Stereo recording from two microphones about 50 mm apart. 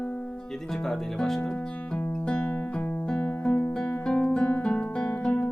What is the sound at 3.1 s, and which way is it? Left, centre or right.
Guitar, left.